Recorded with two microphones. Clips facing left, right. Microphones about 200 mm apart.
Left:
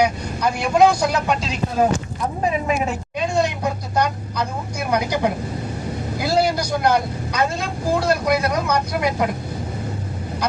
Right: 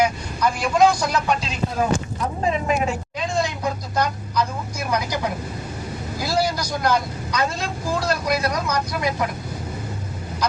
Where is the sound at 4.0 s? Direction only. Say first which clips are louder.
Left 1 dB; 60° left (ahead or behind).